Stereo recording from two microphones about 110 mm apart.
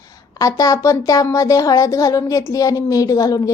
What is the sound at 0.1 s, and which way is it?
A woman's voice, 30° left (ahead or behind).